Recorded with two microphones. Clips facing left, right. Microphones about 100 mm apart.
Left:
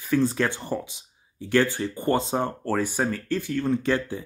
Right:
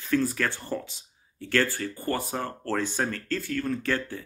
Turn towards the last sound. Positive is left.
turn(degrees=15)  # may be behind; listen again after turning